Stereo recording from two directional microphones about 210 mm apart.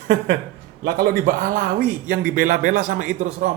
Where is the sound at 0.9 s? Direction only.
45° right (ahead or behind).